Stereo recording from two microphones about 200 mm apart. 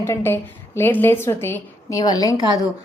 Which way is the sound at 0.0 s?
10° left (ahead or behind).